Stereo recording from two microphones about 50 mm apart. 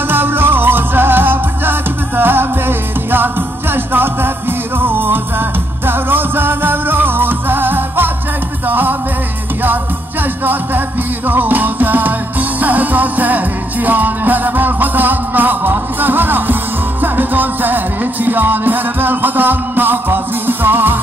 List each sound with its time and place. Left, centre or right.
0.1 s music: right
10.4 s music: right